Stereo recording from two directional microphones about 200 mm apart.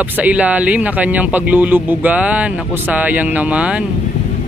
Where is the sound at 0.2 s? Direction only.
5° right (ahead or behind).